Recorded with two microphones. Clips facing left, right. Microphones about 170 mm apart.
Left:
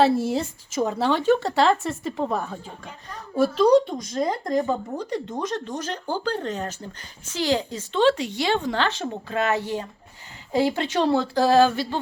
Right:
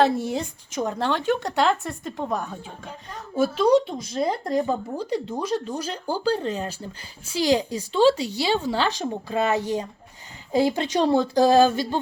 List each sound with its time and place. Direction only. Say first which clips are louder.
0.0 s a woman's voice: left 1 dB; centre (ahead or behind); by 11.9 s 15° right (ahead or behind)